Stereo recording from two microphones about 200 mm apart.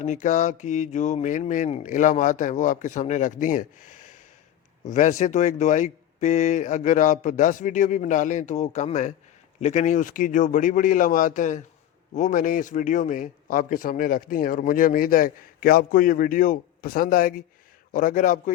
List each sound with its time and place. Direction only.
0.0 s speech: 40° left (ahead or behind)